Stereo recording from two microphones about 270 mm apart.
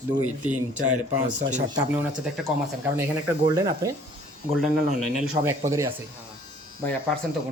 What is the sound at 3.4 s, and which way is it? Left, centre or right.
Speech, centre.